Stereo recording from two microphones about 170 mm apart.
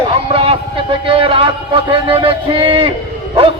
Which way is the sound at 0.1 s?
35° right (ahead or behind).